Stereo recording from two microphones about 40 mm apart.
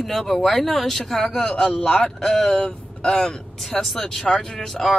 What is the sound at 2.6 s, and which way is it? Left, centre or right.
Speech, centre.